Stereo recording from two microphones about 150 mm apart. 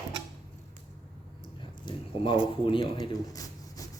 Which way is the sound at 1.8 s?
35° left (ahead or behind).